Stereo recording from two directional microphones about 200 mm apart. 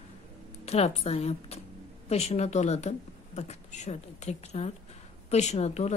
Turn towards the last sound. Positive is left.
turn(degrees=35)  # may be behind; listen again after turning